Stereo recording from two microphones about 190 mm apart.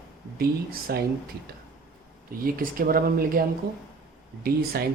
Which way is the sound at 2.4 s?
50° right (ahead or behind).